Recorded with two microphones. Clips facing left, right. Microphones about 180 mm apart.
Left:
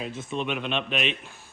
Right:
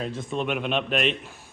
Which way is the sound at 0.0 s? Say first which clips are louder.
Right 2 dB; 5° left (ahead or behind).